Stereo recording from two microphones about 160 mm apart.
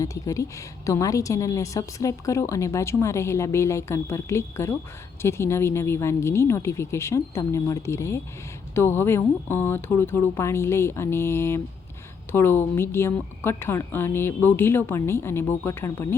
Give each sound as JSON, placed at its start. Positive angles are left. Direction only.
{"t": 0.0, "sound": "a woman's voice", "side_deg": 20}